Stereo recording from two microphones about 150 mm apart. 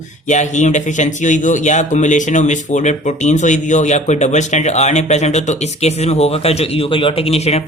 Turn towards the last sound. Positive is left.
turn(degrees=45)  # may be behind; listen again after turning